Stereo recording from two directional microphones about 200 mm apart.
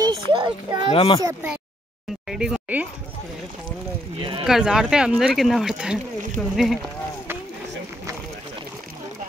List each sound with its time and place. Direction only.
0.0 s a child's voice: 20° right (ahead or behind)
0.9 s speech: 25° left (ahead or behind)
2.2 s speech: 5° right (ahead or behind)
4.2 s speech: 25° right (ahead or behind)
4.5 s speech: 5° right (ahead or behind)